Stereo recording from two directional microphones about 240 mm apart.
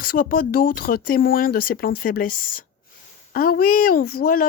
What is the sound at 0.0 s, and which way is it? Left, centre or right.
Speech, left.